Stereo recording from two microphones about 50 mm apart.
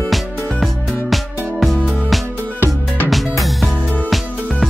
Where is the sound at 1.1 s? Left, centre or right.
Centre.